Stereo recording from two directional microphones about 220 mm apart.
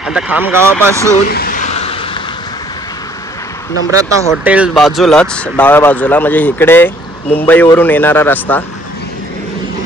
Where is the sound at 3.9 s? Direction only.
10° right (ahead or behind); by 8.6 s 10° left (ahead or behind).